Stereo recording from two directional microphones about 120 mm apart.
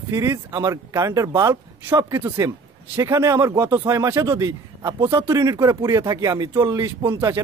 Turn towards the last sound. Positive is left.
turn(degrees=-20)  # may be behind; listen again after turning